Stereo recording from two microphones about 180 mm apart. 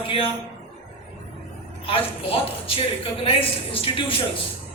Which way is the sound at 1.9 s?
30° left (ahead or behind).